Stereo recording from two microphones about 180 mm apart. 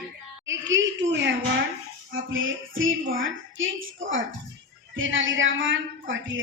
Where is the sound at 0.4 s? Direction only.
90° right.